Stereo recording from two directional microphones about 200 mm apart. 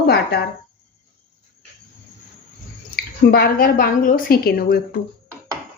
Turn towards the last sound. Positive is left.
turn(degrees=50)  # may be behind; listen again after turning